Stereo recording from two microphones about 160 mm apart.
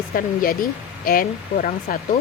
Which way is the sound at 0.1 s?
60° left (ahead or behind).